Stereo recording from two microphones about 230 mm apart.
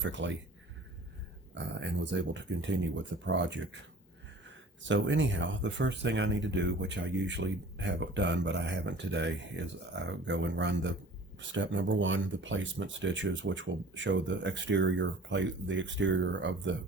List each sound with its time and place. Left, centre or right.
0.0 s speech: right
1.5 s speech: right
4.9 s speech: right